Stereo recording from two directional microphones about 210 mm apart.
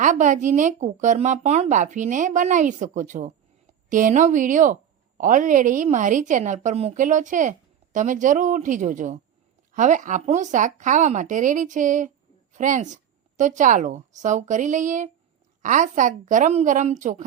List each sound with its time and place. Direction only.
0.0 s a woman's voice: 35° right (ahead or behind)